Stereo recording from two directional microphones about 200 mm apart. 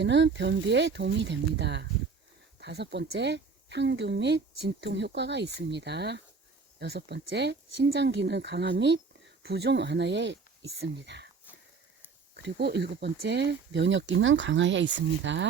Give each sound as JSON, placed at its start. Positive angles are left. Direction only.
{"t": 0.0, "sound": "speech", "side_deg": -60}
{"t": 12.4, "sound": "speech", "side_deg": -55}